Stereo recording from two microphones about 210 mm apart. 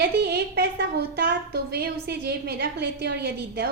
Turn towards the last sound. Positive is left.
turn(degrees=-50)  # may be behind; listen again after turning